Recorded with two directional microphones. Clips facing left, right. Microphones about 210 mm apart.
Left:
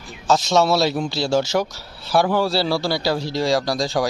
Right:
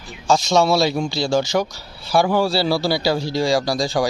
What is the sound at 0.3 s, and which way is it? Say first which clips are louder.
Speech: right 1 dB; 5° left (ahead or behind).